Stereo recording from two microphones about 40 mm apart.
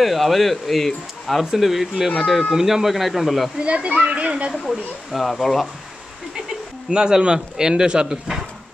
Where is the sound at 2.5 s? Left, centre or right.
Centre.